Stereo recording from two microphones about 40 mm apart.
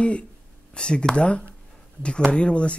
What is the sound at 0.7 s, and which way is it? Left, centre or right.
Speech, left.